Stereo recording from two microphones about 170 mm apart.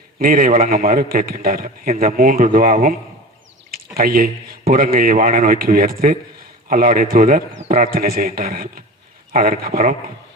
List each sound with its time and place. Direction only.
0.2 s a man's voice: 55° right (ahead or behind)